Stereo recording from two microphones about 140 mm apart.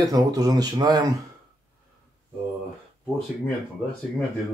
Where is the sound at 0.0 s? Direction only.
25° right (ahead or behind).